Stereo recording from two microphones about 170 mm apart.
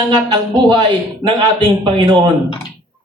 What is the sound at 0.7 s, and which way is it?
Speech, 25° right (ahead or behind).